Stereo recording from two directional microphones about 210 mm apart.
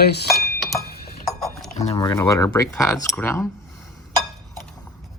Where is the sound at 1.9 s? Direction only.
20° left (ahead or behind).